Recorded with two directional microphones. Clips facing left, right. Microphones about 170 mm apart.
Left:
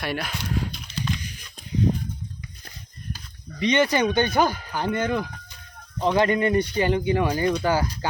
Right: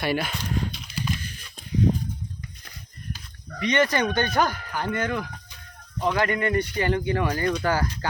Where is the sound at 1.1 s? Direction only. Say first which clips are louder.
Even; 15° left (ahead or behind).